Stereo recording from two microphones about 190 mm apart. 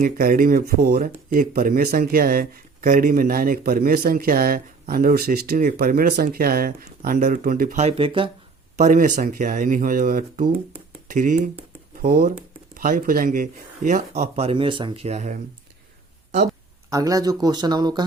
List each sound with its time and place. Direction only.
0.0 s speech: 50° right (ahead or behind); by 8.3 s 30° right (ahead or behind)
8.8 s speech: 45° right (ahead or behind)
16.9 s speech: 20° right (ahead or behind)